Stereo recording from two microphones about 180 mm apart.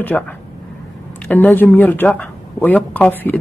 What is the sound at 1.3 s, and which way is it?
Speech, 10° left (ahead or behind).